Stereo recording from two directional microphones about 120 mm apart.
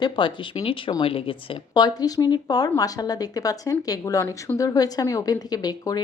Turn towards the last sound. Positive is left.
turn(degrees=35)  # may be behind; listen again after turning